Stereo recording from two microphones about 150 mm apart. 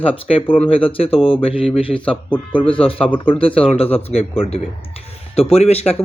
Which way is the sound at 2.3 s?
10° left (ahead or behind).